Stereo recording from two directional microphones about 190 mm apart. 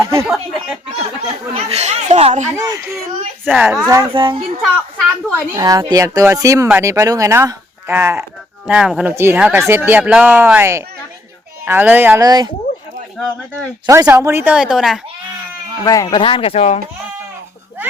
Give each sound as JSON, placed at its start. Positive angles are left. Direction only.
{"t": 0.0, "sound": "speech", "side_deg": -15}
{"t": 0.3, "sound": "a sound", "side_deg": 0}
{"t": 1.5, "sound": "speech", "side_deg": -35}
{"t": 2.6, "sound": "speech", "side_deg": -15}
{"t": 4.1, "sound": "a child's voice", "side_deg": -25}
{"t": 13.2, "sound": "speech", "side_deg": 5}
{"t": 13.8, "sound": "speech", "side_deg": -15}
{"t": 15.8, "sound": "speech", "side_deg": 20}